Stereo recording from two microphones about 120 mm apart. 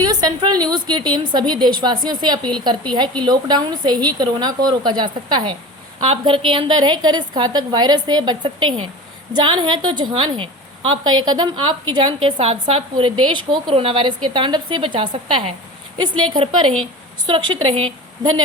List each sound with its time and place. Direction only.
0.0 s a woman's voice: 35° right (ahead or behind)
12.4 s a woman's voice: 55° right (ahead or behind)
17.2 s a woman's voice: 40° right (ahead or behind)
18.2 s speech: 35° right (ahead or behind)